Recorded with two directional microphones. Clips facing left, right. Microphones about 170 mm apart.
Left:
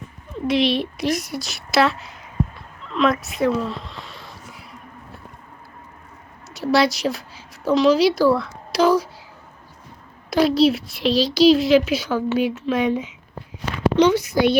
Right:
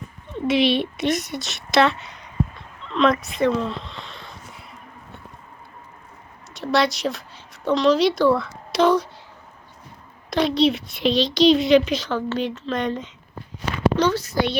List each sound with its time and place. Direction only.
0.3 s speech: centre (ahead or behind)
6.5 s a woman's voice: 5° left (ahead or behind)
10.2 s a woman's voice: 5° left (ahead or behind)